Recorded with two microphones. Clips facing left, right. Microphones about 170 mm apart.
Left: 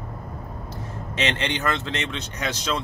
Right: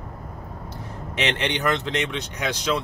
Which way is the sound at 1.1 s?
20° right (ahead or behind).